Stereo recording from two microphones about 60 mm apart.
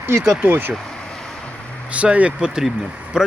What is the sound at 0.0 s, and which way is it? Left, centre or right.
Speech, right.